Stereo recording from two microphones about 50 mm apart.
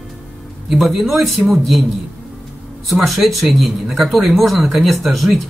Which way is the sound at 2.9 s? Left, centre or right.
Centre.